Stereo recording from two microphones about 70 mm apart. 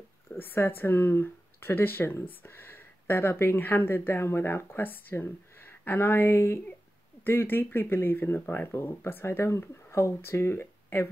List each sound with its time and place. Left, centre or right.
0.3 s speech: left